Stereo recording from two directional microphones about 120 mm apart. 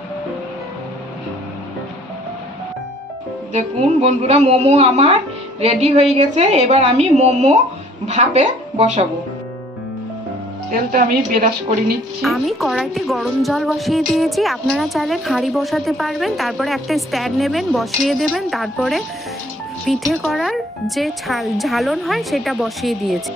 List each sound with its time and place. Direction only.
3.5 s a woman's voice: 60° right (ahead or behind); by 9.0 s 80° right
12.2 s a woman's voice: centre (ahead or behind)